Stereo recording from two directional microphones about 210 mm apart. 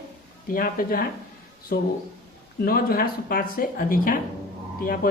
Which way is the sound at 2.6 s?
45° left (ahead or behind).